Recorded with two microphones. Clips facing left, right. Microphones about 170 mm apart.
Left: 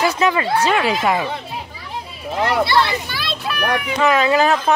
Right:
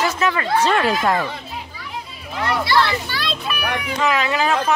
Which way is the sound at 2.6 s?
20° left (ahead or behind).